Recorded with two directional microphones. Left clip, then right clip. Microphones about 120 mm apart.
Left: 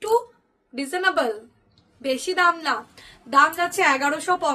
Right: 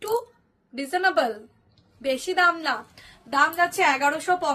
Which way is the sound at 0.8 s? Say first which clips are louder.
Even; 25° left (ahead or behind).